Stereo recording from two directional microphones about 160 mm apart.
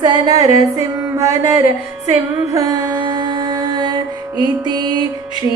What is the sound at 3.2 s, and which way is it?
Music, 30° right (ahead or behind).